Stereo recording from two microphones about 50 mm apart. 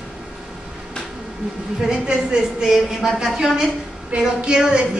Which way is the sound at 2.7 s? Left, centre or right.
Centre.